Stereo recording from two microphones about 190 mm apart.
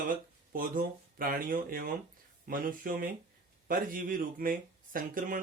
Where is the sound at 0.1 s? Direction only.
45° right (ahead or behind).